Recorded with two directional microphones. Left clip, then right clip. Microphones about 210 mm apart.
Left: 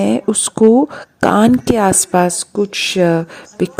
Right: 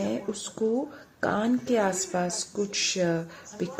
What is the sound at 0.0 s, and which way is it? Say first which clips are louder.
Speech: left 15 dB; 50° left (ahead or behind).